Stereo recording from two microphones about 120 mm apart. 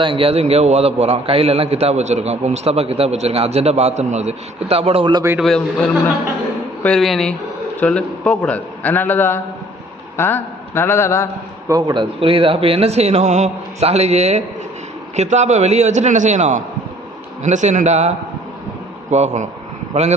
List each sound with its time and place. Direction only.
0.0 s a man's voice: 45° right (ahead or behind)
5.4 s a man's voice: 5° left (ahead or behind); by 11.3 s 25° left (ahead or behind)
11.7 s a man's voice: 35° right (ahead or behind)
12.2 s a man's voice: 50° right (ahead or behind); by 18.1 s 70° right (ahead or behind)
19.1 s a man's voice: 70° right (ahead or behind)